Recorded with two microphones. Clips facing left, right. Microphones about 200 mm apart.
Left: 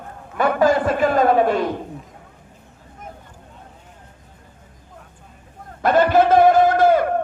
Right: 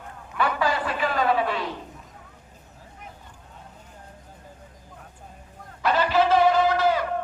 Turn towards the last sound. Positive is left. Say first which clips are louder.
# left 7 dB
turn(degrees=50)  # may be behind; listen again after turning